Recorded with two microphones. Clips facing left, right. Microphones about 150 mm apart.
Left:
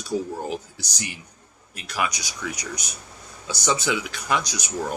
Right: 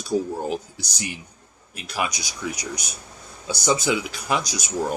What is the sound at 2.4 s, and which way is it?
Speech, 10° right (ahead or behind).